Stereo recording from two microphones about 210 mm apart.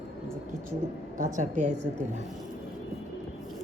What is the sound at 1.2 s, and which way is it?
Speech, 35° right (ahead or behind).